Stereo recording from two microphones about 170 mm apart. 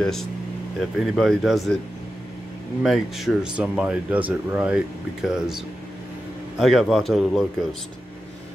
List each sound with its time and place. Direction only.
0.0 s speech: centre (ahead or behind)
2.8 s speech: centre (ahead or behind)
6.6 s speech: centre (ahead or behind)